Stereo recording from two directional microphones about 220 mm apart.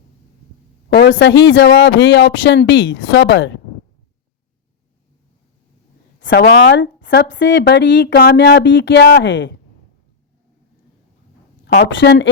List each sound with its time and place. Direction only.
0.9 s speech: 50° left (ahead or behind)
6.1 s a woman's voice: 50° left (ahead or behind)
11.6 s a woman's voice: 50° left (ahead or behind)